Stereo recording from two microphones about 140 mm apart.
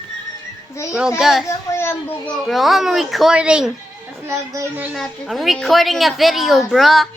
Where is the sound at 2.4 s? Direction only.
Centre (ahead or behind).